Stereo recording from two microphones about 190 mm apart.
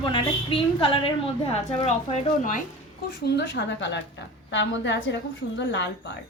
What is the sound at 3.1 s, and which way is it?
A woman's voice, 60° left (ahead or behind).